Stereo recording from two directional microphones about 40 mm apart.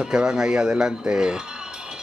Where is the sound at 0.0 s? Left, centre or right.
Centre.